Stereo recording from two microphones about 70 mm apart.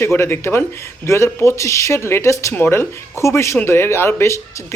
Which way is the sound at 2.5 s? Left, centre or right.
Left.